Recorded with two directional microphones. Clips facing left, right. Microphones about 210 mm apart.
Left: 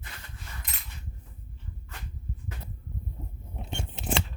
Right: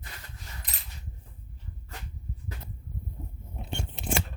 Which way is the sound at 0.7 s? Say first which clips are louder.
Left 1 dB; 35° right (ahead or behind).